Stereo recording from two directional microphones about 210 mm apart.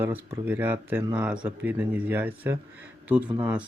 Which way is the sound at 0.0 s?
10° right (ahead or behind).